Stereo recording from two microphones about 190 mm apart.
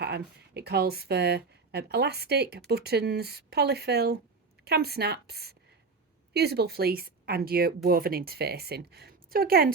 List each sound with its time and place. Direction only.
0.0 s speech: 60° right (ahead or behind)